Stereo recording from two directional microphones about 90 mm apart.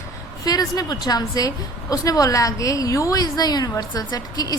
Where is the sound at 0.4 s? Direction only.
45° left (ahead or behind).